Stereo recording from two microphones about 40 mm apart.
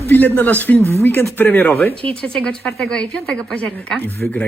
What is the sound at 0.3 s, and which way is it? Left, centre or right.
Speech, left.